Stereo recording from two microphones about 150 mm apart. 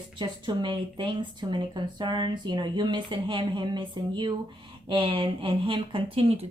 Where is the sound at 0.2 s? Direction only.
30° right (ahead or behind).